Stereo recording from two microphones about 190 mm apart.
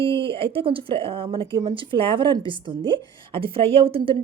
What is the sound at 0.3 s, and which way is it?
A woman's voice, 30° right (ahead or behind).